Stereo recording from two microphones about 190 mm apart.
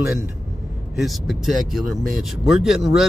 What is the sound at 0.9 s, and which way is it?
Speech, centre (ahead or behind).